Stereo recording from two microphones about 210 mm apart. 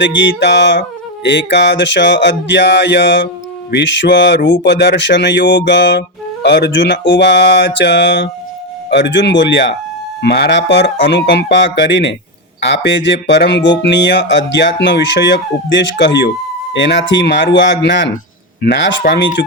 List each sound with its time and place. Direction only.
0.0 s speech: 60° left (ahead or behind)